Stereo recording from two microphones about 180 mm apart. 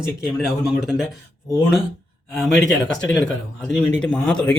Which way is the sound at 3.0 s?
5° left (ahead or behind).